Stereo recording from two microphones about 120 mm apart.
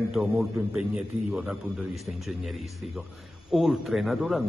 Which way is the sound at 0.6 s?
15° right (ahead or behind).